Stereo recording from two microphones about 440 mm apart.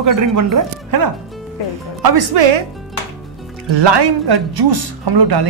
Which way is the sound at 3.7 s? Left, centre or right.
Right.